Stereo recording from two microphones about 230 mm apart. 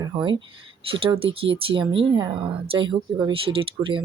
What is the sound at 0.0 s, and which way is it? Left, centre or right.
Speech, centre.